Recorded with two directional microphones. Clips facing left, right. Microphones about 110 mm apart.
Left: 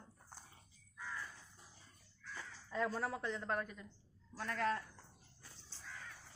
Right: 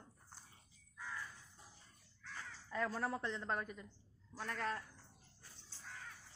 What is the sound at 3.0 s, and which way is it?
Speech, 5° left (ahead or behind).